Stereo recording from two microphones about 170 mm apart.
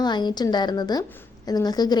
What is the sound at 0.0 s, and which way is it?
A woman's voice, 25° left (ahead or behind).